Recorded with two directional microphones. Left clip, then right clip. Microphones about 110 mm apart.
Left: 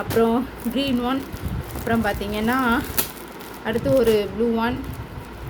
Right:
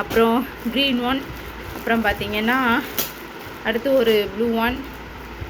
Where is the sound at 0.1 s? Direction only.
5° left (ahead or behind); by 4.7 s 20° left (ahead or behind).